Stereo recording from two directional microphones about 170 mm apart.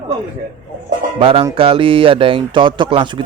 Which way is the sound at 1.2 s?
30° right (ahead or behind).